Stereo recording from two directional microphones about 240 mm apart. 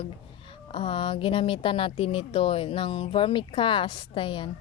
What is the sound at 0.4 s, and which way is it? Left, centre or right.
Speech, left.